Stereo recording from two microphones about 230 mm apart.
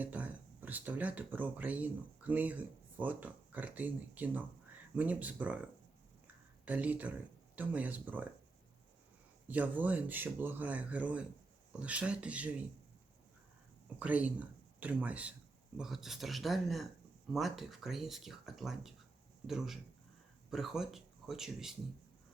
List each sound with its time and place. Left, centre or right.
0.0 s speech: centre
6.7 s speech: centre
9.5 s speech: centre
14.0 s speech: centre